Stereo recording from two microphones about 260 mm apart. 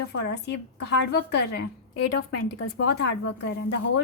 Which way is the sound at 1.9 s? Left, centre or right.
Left.